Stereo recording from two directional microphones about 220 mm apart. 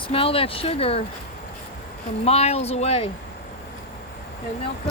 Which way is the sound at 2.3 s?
30° left (ahead or behind).